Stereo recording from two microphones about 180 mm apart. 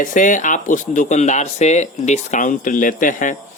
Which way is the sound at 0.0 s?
45° left (ahead or behind).